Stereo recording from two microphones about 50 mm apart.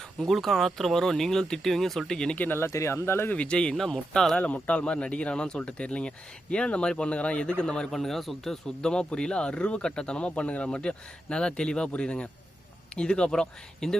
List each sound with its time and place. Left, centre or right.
0.2 s speech: centre
2.6 s speech: left
3.3 s speech: left
4.4 s speech: left
7.9 s speech: centre
8.8 s speech: centre